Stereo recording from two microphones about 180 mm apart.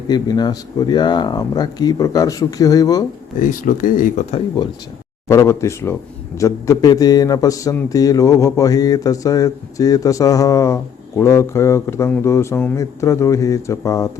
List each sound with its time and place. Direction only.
0.1 s speech: 25° left (ahead or behind)
3.4 s speech: 45° left (ahead or behind)
5.3 s a man's voice: 15° left (ahead or behind)